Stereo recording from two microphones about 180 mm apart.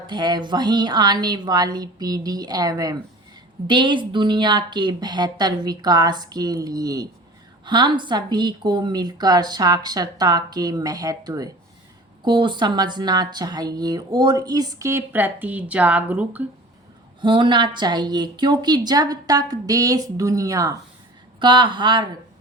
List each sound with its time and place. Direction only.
0.1 s speech: 25° right (ahead or behind); by 16.4 s 10° right (ahead or behind)
17.2 s speech: 25° right (ahead or behind)